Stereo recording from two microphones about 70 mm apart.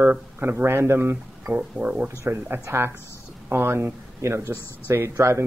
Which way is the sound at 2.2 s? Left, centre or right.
Right.